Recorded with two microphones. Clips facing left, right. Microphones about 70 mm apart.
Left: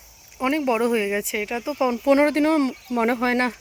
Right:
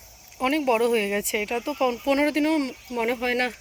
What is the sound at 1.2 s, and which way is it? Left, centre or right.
Speech, centre.